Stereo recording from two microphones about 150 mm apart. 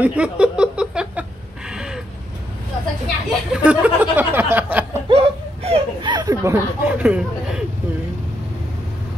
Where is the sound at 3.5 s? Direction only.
10° right (ahead or behind).